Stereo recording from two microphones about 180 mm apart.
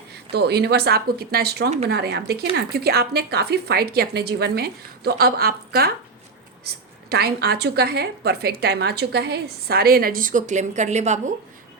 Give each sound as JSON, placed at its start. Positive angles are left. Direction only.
{"t": 0.3, "sound": "a woman's voice", "side_deg": -65}